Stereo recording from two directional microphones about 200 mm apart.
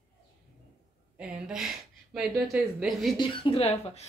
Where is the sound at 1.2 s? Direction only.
5° right (ahead or behind).